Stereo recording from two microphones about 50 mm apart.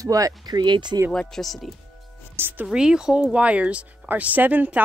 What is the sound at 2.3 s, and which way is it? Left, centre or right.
Speech, right.